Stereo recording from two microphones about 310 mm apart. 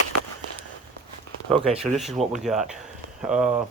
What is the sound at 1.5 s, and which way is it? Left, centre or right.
Speech, centre.